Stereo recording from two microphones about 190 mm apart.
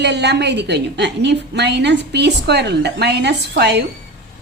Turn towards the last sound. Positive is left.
turn(degrees=-60)  # may be behind; listen again after turning